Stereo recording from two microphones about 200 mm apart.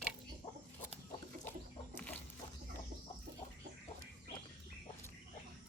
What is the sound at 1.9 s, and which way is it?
Chicken, 10° left (ahead or behind).